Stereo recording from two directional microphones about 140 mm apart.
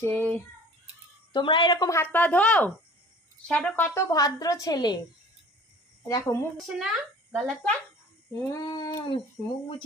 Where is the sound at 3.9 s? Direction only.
25° left (ahead or behind).